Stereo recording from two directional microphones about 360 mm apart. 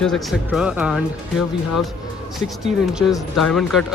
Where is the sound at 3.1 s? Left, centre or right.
Centre.